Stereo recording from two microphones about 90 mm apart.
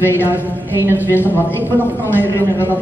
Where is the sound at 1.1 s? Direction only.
25° left (ahead or behind).